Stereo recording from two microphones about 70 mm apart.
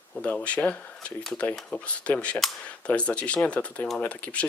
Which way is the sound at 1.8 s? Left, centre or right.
Centre.